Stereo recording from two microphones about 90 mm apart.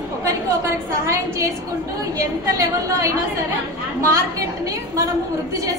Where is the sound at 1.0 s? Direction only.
35° right (ahead or behind).